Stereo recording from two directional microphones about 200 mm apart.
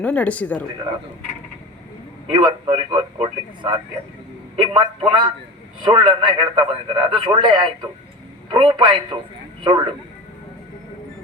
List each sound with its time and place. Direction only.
0.0 s speech: 5° left (ahead or behind)
2.3 s a man's voice: 25° right (ahead or behind)